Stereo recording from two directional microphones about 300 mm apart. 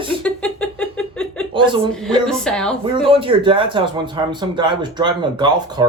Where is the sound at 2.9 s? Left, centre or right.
Centre.